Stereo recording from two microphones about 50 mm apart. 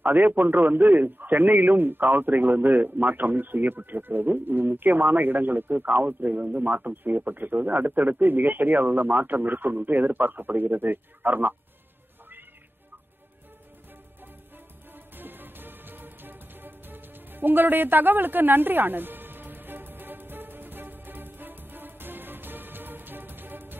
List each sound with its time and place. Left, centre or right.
0.0 s a man's voice: right
15.1 s music: right